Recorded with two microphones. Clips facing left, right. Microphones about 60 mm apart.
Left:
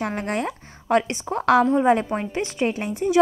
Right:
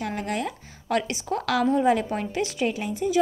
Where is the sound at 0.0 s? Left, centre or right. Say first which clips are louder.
Left 3 dB; left.